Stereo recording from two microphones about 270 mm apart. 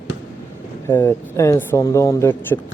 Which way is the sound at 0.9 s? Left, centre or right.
Centre.